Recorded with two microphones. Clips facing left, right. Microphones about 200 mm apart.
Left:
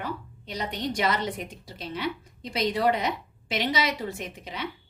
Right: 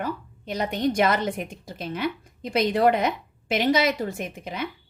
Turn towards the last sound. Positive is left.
turn(degrees=-50)  # may be behind; listen again after turning